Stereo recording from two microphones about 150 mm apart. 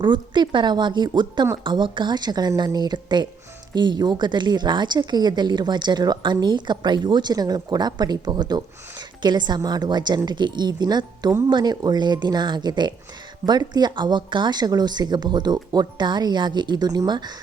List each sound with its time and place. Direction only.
0.0 s speech: 30° right (ahead or behind)